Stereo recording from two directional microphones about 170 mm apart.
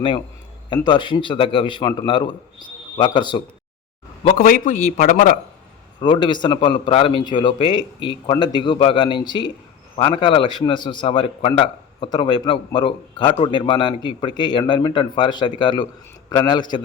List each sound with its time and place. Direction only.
0.9 s a man's voice: 25° left (ahead or behind)
4.4 s a man's voice: 55° left (ahead or behind)
6.0 s a man's voice: 30° left (ahead or behind)